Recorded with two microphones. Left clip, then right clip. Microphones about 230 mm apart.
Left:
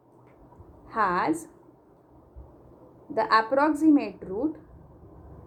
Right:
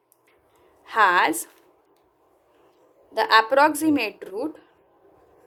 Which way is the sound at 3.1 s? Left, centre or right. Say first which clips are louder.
Right 4 dB; right.